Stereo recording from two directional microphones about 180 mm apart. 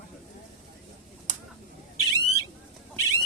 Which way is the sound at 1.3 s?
40° right (ahead or behind).